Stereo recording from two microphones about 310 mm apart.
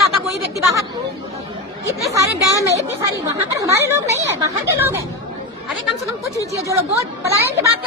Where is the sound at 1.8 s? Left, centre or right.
Centre.